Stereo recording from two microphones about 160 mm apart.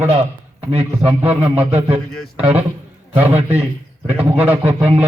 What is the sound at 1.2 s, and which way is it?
A man's voice, 10° right (ahead or behind).